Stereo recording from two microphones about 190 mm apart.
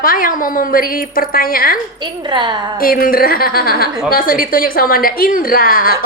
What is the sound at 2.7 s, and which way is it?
A woman's voice, 50° left (ahead or behind).